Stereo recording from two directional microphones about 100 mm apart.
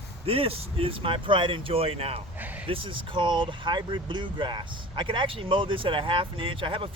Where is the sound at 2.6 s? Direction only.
65° right (ahead or behind).